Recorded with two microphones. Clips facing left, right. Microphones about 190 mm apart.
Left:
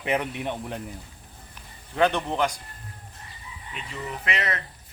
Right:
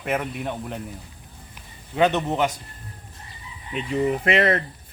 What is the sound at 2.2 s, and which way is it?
Speech, 10° right (ahead or behind).